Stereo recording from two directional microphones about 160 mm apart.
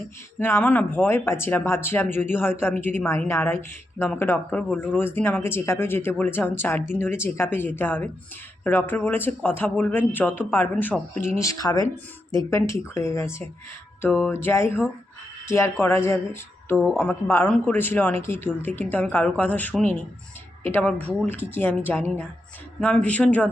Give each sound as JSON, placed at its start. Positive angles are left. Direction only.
{"t": 0.3, "sound": "speech", "side_deg": 15}
{"t": 16.7, "sound": "speech", "side_deg": -5}
{"t": 17.0, "sound": "speech", "side_deg": 15}
{"t": 22.8, "sound": "speech", "side_deg": 5}